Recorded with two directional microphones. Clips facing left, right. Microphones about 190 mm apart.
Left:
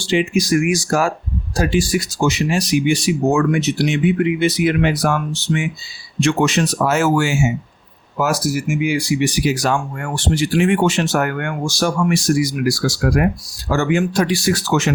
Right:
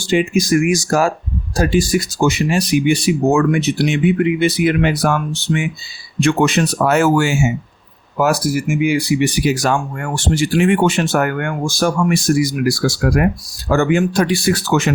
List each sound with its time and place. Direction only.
0.0 s speech: 50° right (ahead or behind)